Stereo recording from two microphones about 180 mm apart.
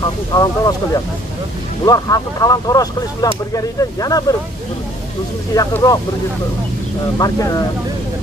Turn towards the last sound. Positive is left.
turn(degrees=20)  # may be behind; listen again after turning